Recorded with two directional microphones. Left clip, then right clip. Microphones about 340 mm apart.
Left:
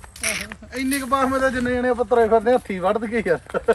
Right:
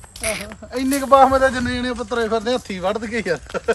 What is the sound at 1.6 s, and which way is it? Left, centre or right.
Speech, centre.